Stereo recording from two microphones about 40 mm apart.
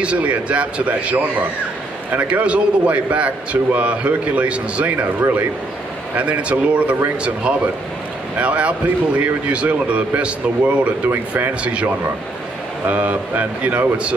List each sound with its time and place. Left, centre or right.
0.0 s a man's voice: right
2.2 s a man's voice: right
6.1 s a man's voice: right
11.1 s speech: right
11.6 s a man's voice: right